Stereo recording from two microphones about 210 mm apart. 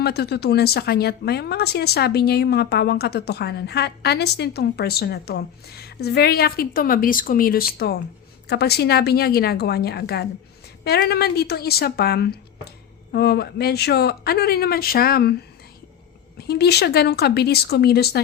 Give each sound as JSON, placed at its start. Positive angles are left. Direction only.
{"t": 0.0, "sound": "a woman's voice", "side_deg": 50}
{"t": 16.4, "sound": "a woman's voice", "side_deg": 50}